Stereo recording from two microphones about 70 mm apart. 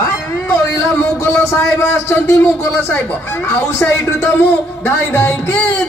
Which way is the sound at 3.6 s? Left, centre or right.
Left.